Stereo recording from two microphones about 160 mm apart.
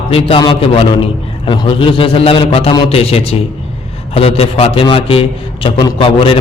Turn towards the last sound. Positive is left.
turn(degrees=35)  # may be behind; listen again after turning